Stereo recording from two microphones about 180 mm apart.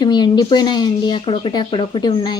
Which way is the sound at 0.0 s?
25° left (ahead or behind).